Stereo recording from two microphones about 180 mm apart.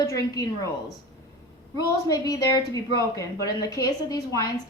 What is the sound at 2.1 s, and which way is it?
A woman's voice, 20° left (ahead or behind).